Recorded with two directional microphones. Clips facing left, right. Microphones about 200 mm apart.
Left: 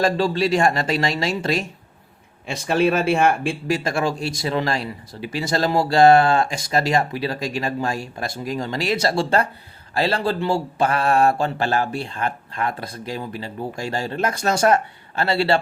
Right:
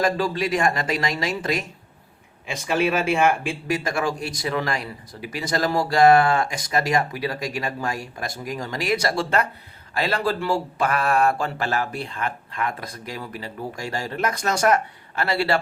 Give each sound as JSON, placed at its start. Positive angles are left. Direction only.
{"t": 0.0, "sound": "speech", "side_deg": 30}